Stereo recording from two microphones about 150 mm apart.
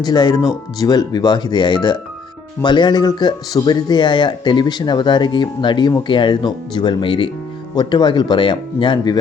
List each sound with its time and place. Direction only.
0.0 s speech: 30° left (ahead or behind)